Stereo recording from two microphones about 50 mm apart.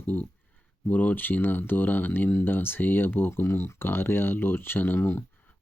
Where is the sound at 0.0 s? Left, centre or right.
Left.